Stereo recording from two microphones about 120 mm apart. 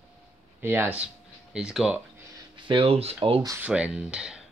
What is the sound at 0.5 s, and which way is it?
Speech, 15° right (ahead or behind).